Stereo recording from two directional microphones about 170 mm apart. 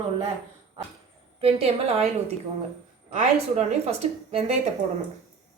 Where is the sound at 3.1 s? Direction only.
40° right (ahead or behind).